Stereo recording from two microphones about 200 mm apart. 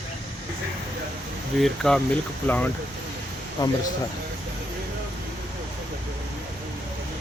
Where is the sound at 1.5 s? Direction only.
Centre (ahead or behind); by 3.7 s 20° left (ahead or behind).